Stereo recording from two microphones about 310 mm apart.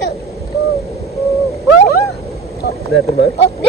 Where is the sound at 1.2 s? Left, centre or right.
Centre.